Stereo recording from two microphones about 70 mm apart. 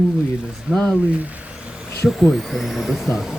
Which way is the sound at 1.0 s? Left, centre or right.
Centre.